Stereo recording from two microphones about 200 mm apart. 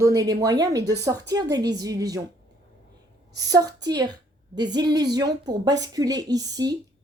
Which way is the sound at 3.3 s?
20° right (ahead or behind).